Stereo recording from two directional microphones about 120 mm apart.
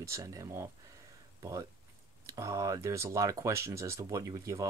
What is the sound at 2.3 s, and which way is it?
Speech, 25° right (ahead or behind).